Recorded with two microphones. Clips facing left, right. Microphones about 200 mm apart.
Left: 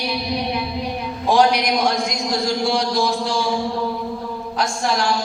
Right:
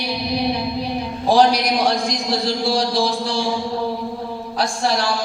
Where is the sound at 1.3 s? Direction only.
35° right (ahead or behind).